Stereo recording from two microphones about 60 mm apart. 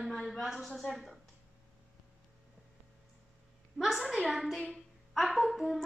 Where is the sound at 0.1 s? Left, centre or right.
Centre.